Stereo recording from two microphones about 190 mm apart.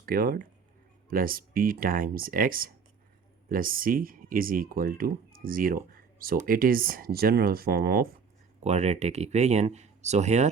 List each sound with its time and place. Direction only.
0.0 s speech: 50° right (ahead or behind)
8.6 s speech: 35° right (ahead or behind)